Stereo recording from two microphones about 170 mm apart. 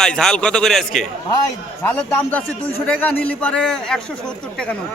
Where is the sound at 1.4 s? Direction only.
10° left (ahead or behind).